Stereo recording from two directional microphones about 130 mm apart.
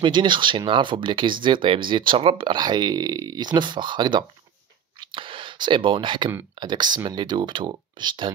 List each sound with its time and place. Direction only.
0.0 s speech: 35° right (ahead or behind)
5.0 s a sound: 40° right (ahead or behind)
6.6 s speech: 35° right (ahead or behind)